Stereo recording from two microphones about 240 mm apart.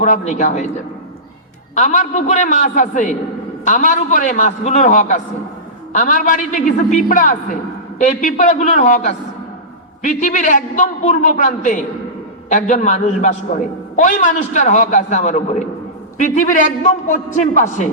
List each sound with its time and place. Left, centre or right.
0.0 s a man's voice: left
1.7 s a man's voice: left